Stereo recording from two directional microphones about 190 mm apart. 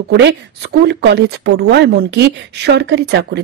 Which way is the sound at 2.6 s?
65° right (ahead or behind).